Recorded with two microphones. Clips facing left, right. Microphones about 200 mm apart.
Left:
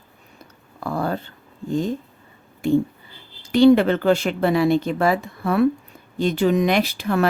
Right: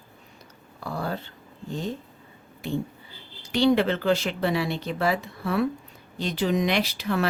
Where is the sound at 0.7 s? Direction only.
50° left (ahead or behind).